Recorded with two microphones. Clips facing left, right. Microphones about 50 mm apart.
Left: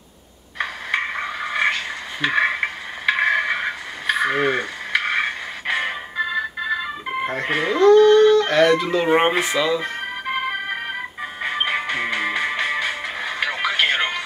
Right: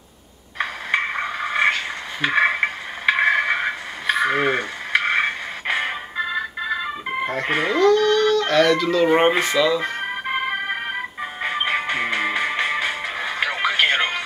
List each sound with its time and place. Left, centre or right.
0.6 s a sound: centre
7.4 s speech: centre
7.8 s speech: left; by 9.8 s centre
11.8 s music: centre